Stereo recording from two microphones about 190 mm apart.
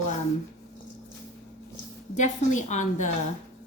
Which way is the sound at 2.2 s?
40° left (ahead or behind).